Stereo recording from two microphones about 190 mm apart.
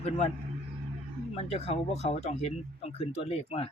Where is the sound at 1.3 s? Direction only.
35° left (ahead or behind).